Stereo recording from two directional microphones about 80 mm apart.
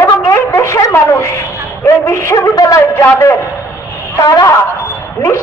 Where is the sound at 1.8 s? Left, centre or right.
Left.